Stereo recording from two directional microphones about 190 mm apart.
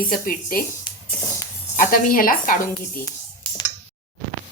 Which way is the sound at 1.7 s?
45° left (ahead or behind).